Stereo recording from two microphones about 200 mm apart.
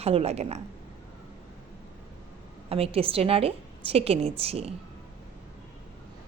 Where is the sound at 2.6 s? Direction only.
30° right (ahead or behind).